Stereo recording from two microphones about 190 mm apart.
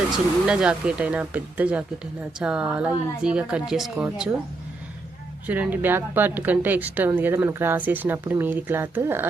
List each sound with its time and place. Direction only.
0.4 s speech: 5° right (ahead or behind)
5.5 s speech: 10° right (ahead or behind)